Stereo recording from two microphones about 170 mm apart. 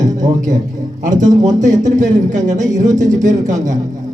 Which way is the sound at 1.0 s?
50° right (ahead or behind).